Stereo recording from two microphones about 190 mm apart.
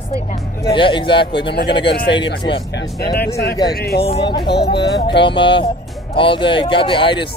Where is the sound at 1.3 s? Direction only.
60° left (ahead or behind).